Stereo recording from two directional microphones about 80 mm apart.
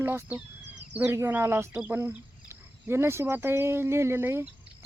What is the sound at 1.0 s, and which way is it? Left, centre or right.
Speech, right.